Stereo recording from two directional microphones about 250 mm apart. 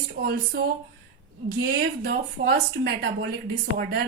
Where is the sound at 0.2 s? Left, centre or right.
Right.